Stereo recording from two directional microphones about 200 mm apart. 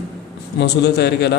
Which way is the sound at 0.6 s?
55° left (ahead or behind).